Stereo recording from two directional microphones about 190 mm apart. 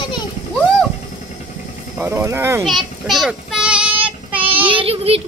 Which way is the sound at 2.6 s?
Centre (ahead or behind).